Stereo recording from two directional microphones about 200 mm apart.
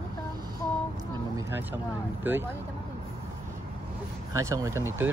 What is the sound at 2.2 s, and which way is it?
Speech, 10° right (ahead or behind).